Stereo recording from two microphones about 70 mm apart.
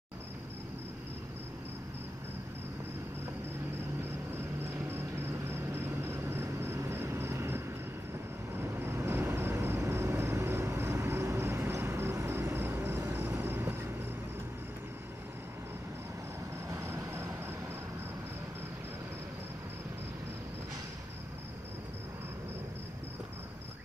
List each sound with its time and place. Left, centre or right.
4.6 s vehicle: right
16.6 s vehicle: right